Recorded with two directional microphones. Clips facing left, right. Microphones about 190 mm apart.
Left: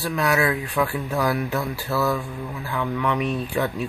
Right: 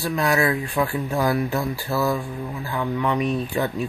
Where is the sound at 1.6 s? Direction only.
15° right (ahead or behind).